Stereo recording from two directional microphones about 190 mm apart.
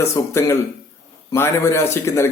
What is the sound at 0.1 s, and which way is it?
A man's voice, 15° left (ahead or behind).